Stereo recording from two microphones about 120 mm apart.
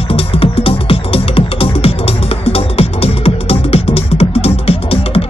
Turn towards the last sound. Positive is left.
turn(degrees=55)  # may be behind; listen again after turning